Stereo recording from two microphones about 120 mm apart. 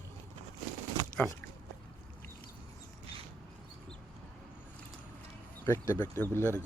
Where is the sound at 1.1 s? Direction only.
10° left (ahead or behind).